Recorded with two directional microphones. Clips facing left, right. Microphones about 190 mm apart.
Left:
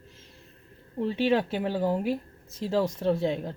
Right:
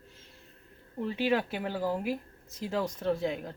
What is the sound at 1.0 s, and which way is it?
Speech, 30° left (ahead or behind).